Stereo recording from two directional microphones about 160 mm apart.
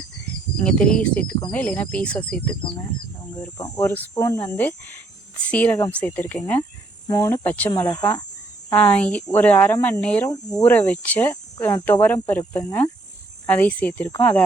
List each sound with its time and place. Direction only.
0.6 s speech: 5° left (ahead or behind)
3.6 s speech: 20° left (ahead or behind)
4.5 s speech: 10° left (ahead or behind)
7.7 s speech: 25° left (ahead or behind)
8.7 s speech: 10° left (ahead or behind)